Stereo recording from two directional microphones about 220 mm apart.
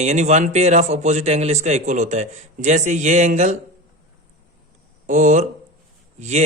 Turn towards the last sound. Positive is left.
turn(degrees=-30)  # may be behind; listen again after turning